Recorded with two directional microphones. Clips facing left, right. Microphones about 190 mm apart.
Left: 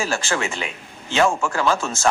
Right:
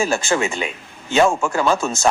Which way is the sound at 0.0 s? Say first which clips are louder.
Right 4 dB; 15° right (ahead or behind).